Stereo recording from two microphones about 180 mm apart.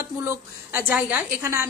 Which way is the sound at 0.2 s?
10° right (ahead or behind).